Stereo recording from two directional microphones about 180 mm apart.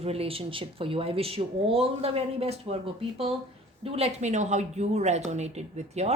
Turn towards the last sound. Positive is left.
turn(degrees=-35)  # may be behind; listen again after turning